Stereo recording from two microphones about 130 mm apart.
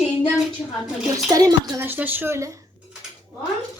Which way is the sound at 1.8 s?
15° right (ahead or behind).